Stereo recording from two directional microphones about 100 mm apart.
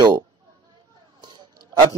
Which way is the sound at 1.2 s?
45° right (ahead or behind).